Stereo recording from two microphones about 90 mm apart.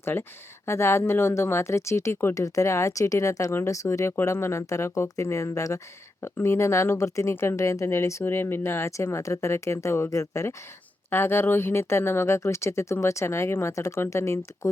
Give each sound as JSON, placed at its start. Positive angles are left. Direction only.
{"t": 0.0, "sound": "speech", "side_deg": 25}